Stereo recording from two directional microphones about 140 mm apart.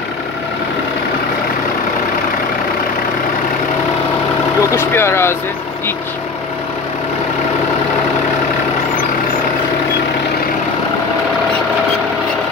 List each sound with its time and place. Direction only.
4.6 s speech: 20° left (ahead or behind)